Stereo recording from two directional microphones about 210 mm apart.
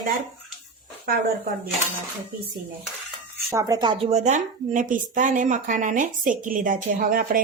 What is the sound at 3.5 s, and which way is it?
A woman's voice, 15° right (ahead or behind).